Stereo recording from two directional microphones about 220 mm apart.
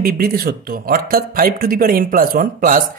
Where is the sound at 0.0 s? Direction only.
45° right (ahead or behind).